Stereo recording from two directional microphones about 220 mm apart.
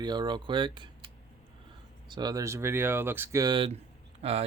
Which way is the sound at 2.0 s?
20° right (ahead or behind).